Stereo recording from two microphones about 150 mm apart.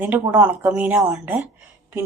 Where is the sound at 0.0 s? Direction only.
10° right (ahead or behind).